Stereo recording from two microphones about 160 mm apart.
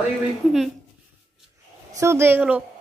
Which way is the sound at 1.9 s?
15° right (ahead or behind).